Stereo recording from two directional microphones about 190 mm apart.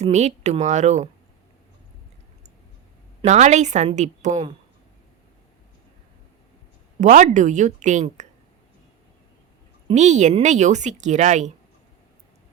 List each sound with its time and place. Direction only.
0.0 s speech: 35° right (ahead or behind)
3.2 s speech: 35° right (ahead or behind)
7.0 s speech: 40° right (ahead or behind)
9.9 s speech: 40° right (ahead or behind)